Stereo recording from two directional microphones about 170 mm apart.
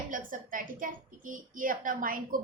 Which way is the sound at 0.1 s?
50° right (ahead or behind).